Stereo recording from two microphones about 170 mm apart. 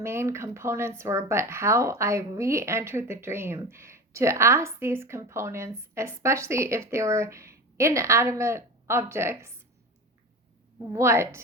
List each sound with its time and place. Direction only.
0.0 s speech: 15° right (ahead or behind)
10.9 s speech: 15° right (ahead or behind)